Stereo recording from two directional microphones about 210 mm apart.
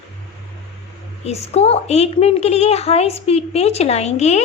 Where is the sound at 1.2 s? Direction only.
30° left (ahead or behind).